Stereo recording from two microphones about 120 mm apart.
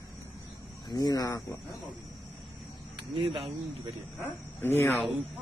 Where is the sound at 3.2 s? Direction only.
50° right (ahead or behind).